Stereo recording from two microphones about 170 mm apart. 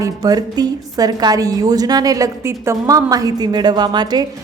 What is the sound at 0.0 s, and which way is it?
A woman's voice, 20° right (ahead or behind).